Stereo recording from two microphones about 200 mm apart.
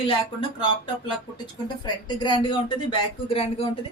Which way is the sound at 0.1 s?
25° left (ahead or behind).